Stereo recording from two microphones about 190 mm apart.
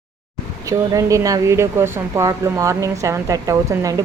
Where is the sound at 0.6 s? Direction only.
15° right (ahead or behind).